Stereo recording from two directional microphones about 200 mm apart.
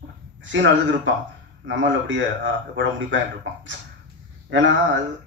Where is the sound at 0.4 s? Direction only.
70° right (ahead or behind).